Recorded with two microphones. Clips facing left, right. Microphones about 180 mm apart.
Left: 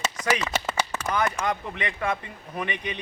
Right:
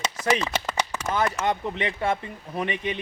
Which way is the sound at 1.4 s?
25° right (ahead or behind).